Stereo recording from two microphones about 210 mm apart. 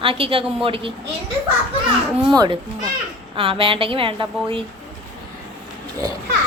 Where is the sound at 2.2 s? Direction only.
20° right (ahead or behind).